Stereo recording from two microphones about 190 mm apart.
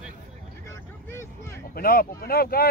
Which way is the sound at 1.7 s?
50° left (ahead or behind).